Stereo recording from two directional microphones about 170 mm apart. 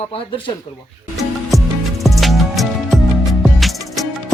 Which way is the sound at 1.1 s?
Centre (ahead or behind).